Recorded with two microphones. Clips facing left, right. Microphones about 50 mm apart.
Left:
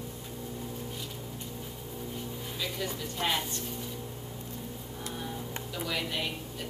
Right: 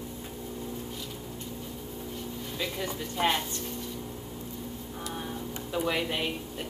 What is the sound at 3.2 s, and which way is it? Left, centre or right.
Speech, centre.